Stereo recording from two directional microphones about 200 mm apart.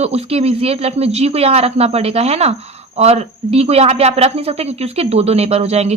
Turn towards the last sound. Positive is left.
turn(degrees=-30)  # may be behind; listen again after turning